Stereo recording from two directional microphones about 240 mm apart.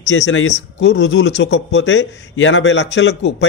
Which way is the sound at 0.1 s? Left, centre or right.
Left.